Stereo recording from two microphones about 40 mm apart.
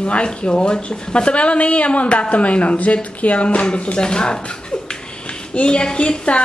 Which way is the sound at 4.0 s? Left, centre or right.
Left.